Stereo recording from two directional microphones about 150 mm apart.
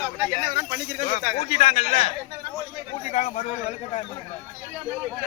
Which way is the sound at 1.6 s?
45° left (ahead or behind).